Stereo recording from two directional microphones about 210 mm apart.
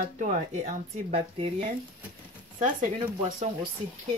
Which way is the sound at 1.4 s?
25° right (ahead or behind).